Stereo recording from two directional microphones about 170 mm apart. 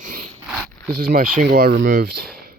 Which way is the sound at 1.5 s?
65° right (ahead or behind).